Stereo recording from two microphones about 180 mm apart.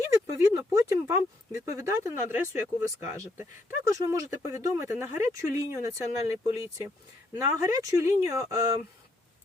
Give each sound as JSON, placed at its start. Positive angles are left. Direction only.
{"t": 0.3, "sound": "speech", "side_deg": -15}